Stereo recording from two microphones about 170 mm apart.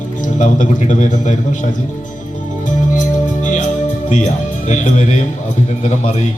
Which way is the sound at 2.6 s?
50° left (ahead or behind).